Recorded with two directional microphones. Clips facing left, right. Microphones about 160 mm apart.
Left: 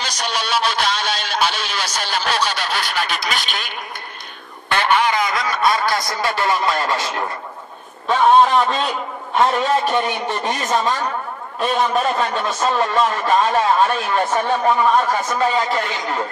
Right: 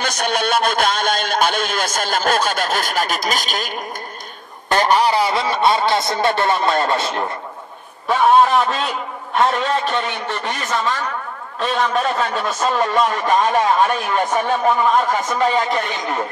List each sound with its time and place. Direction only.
0.0 s a man's voice: 55° right (ahead or behind); by 7.2 s 25° right (ahead or behind)
8.1 s a man's voice: 5° right (ahead or behind)
9.4 s a man's voice: 10° left (ahead or behind)
12.7 s a man's voice: 15° right (ahead or behind)